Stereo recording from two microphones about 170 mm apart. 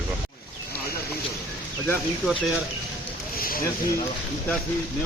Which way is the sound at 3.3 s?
60° left (ahead or behind).